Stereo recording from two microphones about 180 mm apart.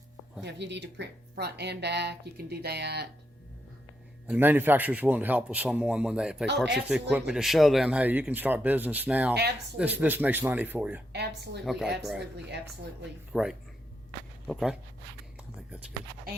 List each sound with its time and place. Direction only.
0.4 s speech: 70° right (ahead or behind)
4.3 s speech: 10° right (ahead or behind)
11.1 s a woman's voice: 65° right (ahead or behind)
11.6 s speech: centre (ahead or behind)
12.2 s speech: 65° right (ahead or behind)
13.3 s speech: 5° right (ahead or behind)